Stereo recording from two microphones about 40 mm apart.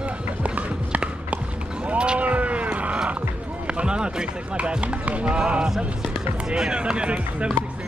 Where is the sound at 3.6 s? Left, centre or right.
Right.